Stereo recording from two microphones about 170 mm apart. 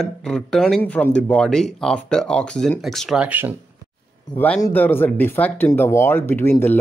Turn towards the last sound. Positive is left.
turn(degrees=10)  # may be behind; listen again after turning